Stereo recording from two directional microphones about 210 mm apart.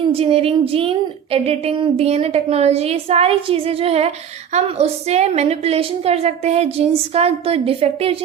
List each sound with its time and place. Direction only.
0.0 s a woman's voice: 25° right (ahead or behind)